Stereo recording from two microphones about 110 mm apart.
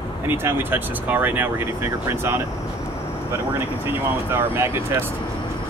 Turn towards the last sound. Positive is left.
turn(degrees=-20)  # may be behind; listen again after turning